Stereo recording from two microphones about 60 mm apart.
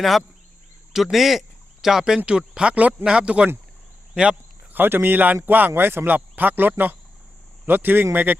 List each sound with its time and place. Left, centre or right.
0.0 s speech: centre
4.7 s a man's voice: right